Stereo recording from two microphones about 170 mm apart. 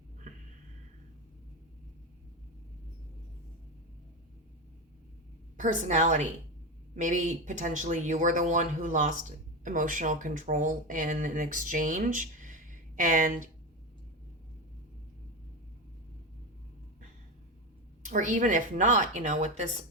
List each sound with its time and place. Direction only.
5.5 s speech: 45° right (ahead or behind)
18.0 s speech: 50° right (ahead or behind)